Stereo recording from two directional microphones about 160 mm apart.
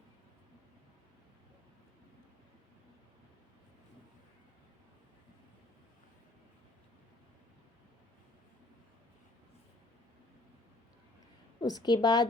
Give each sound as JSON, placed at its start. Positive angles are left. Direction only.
{"t": 11.6, "sound": "a woman's voice", "side_deg": 25}